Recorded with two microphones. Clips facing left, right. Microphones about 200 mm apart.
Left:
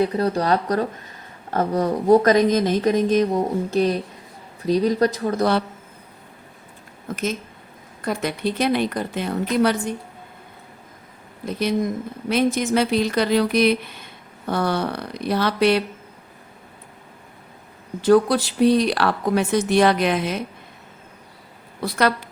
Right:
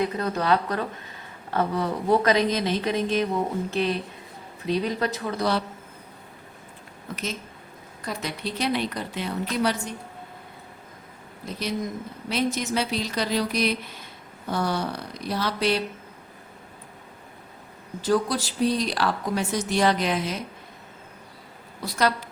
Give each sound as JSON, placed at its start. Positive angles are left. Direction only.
{"t": 0.0, "sound": "speech", "side_deg": 35}
{"t": 7.1, "sound": "speech", "side_deg": 45}
{"t": 12.3, "sound": "speech", "side_deg": 50}
{"t": 18.0, "sound": "speech", "side_deg": 60}
{"t": 21.8, "sound": "speech", "side_deg": 60}